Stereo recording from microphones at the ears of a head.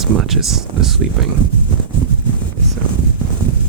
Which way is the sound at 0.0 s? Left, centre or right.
Right.